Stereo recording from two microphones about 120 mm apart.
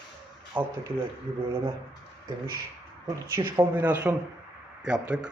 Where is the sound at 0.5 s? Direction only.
15° right (ahead or behind).